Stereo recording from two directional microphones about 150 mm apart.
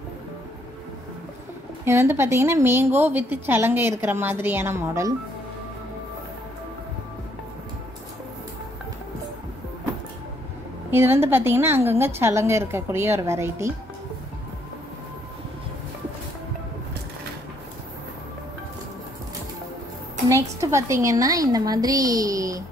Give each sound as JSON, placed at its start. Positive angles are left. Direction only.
{"t": 1.9, "sound": "a woman's voice", "side_deg": -15}
{"t": 10.9, "sound": "a woman's voice", "side_deg": -15}
{"t": 20.2, "sound": "a woman's voice", "side_deg": -20}